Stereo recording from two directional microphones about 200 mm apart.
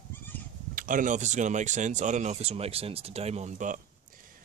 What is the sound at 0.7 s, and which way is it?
Speech, 45° right (ahead or behind).